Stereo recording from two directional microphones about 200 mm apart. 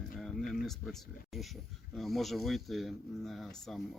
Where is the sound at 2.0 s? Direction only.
Centre (ahead or behind).